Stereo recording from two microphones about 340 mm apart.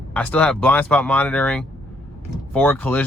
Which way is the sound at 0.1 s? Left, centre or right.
Centre.